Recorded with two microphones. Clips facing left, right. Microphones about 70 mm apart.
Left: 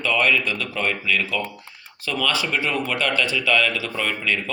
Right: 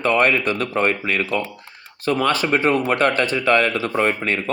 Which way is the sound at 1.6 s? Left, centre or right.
Right.